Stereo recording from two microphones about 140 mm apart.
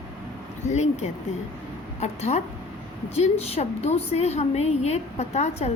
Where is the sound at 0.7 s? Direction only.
55° left (ahead or behind).